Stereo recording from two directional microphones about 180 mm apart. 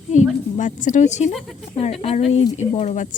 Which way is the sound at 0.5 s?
45° left (ahead or behind).